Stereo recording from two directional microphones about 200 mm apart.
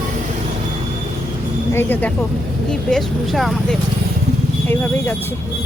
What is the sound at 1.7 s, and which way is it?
A woman's voice, 10° left (ahead or behind).